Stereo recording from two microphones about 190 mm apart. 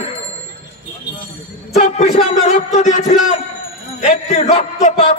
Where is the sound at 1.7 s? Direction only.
35° left (ahead or behind).